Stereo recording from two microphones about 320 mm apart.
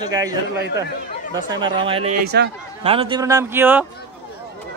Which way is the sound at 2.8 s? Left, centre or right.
Centre.